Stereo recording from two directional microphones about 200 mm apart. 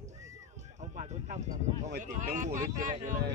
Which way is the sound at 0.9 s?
35° right (ahead or behind).